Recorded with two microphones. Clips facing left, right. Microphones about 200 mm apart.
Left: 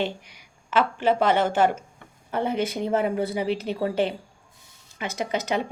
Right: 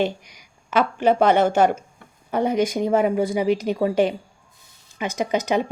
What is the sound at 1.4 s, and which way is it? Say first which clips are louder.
Speech: right 4 dB; 45° right (ahead or behind).